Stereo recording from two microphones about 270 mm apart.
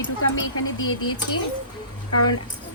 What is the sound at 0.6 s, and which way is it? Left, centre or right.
Speech, left.